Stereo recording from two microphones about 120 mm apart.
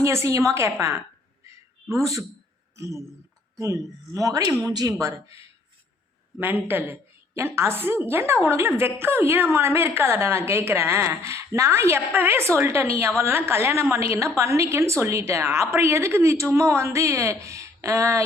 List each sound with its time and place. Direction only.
0.0 s a woman's voice: 25° right (ahead or behind)
4.1 s a woman's voice: 30° right (ahead or behind)
6.4 s a man's voice: 15° right (ahead or behind)